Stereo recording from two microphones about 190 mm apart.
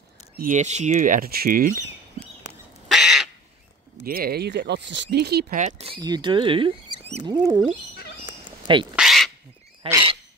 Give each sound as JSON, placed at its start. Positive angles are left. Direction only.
{"t": 0.4, "sound": "speech", "side_deg": -40}
{"t": 2.9, "sound": "bird", "side_deg": 0}
{"t": 4.0, "sound": "speech", "side_deg": -50}
{"t": 5.6, "sound": "speech", "side_deg": -35}
{"t": 7.2, "sound": "speech", "side_deg": -20}
{"t": 8.9, "sound": "bird", "side_deg": 0}